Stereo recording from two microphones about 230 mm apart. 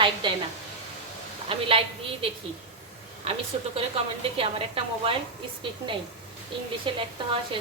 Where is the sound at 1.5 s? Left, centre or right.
Right.